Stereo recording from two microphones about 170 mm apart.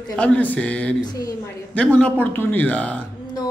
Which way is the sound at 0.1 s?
5° left (ahead or behind).